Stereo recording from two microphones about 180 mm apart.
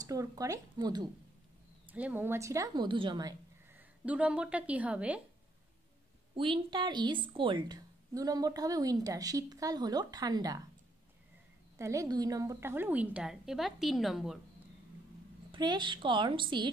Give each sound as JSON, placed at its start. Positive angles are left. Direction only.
{"t": 0.0, "sound": "a woman's voice", "side_deg": -20}
{"t": 1.9, "sound": "a woman's voice", "side_deg": -10}
{"t": 3.7, "sound": "speech", "side_deg": -10}
{"t": 6.3, "sound": "a woman's voice", "side_deg": -30}
{"t": 11.8, "sound": "a woman's voice", "side_deg": -15}
{"t": 15.5, "sound": "a woman's voice", "side_deg": -25}